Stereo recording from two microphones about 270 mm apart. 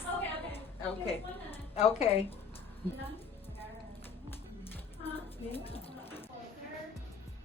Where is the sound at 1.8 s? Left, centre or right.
Left.